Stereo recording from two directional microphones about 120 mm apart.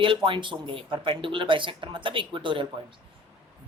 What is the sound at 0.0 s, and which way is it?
A woman's voice, 45° right (ahead or behind).